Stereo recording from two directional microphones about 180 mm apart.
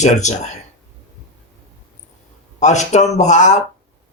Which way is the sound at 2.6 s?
40° left (ahead or behind).